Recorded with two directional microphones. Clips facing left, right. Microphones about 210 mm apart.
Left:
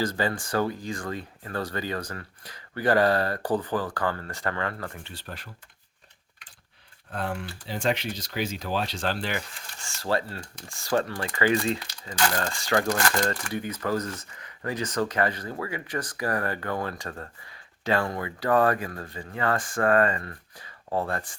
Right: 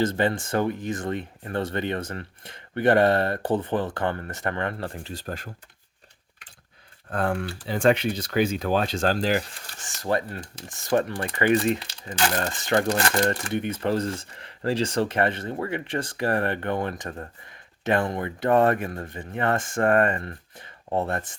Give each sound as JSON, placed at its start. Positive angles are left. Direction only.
{"t": 0.0, "sound": "speech", "side_deg": -25}
{"t": 5.1, "sound": "speech", "side_deg": -45}
{"t": 7.1, "sound": "speech", "side_deg": -50}
{"t": 9.8, "sound": "speech", "side_deg": -20}